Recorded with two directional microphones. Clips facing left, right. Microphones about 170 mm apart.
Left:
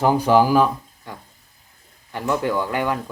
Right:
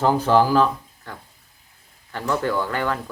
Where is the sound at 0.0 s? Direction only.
15° left (ahead or behind).